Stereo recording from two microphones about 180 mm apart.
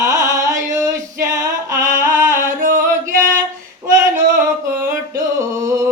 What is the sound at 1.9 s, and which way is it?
Music, 45° right (ahead or behind).